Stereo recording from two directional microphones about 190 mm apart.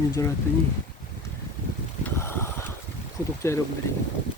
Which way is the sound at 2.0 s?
10° left (ahead or behind).